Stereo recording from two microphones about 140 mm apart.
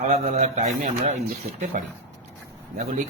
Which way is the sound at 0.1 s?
60° right (ahead or behind).